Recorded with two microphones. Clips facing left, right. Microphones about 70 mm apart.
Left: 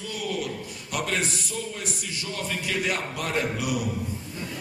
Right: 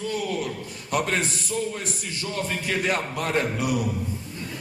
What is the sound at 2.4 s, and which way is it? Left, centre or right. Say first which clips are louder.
A man's voice: right 1 dB; right.